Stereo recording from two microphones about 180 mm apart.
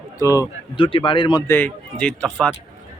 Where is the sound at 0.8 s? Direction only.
30° left (ahead or behind).